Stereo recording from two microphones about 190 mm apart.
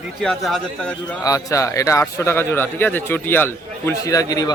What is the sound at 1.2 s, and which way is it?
Speech, 15° left (ahead or behind).